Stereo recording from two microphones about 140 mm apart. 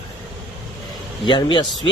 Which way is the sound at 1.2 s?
35° left (ahead or behind).